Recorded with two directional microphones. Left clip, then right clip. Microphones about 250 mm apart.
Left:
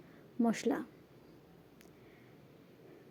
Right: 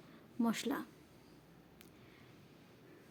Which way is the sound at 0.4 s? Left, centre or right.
Centre.